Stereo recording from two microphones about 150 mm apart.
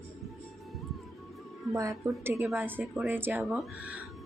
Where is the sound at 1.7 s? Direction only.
20° right (ahead or behind).